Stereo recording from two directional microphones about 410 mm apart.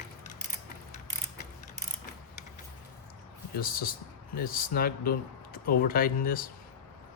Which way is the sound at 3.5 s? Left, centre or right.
Left.